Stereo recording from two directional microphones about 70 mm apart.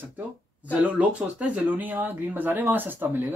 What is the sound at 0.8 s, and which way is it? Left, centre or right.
Speech, centre.